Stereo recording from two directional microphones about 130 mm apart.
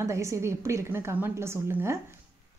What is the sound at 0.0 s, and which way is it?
Speech, 20° right (ahead or behind).